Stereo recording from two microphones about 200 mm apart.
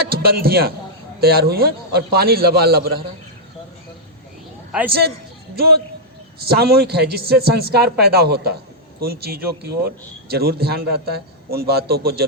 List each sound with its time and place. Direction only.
0.0 s a man's voice: 50° right (ahead or behind)
4.9 s speech: 50° right (ahead or behind)